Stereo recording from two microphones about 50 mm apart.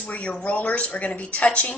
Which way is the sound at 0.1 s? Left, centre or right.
Left.